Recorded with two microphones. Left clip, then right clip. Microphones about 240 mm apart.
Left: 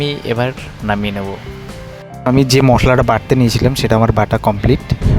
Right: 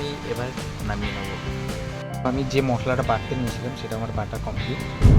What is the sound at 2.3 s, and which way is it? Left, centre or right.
Speech, left.